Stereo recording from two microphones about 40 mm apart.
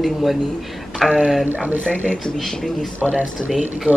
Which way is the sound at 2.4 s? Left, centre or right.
Centre.